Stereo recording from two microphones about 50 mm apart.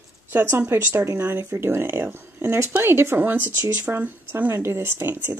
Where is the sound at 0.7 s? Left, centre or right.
Right.